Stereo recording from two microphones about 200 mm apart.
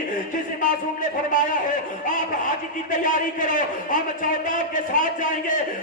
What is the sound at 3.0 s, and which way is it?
A man's voice, 40° left (ahead or behind).